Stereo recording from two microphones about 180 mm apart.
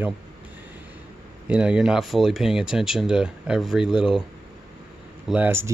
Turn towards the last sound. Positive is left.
turn(degrees=-15)  # may be behind; listen again after turning